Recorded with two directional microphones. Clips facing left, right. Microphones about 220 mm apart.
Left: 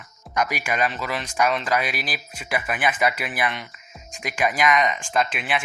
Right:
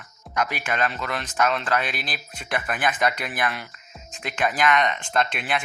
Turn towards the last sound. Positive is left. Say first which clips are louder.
# left 1 dB
turn(degrees=5)  # may be behind; listen again after turning